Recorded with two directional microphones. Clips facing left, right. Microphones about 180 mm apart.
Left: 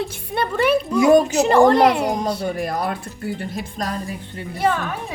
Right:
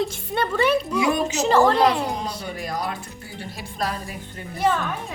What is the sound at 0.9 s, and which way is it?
A woman's voice, 45° left (ahead or behind).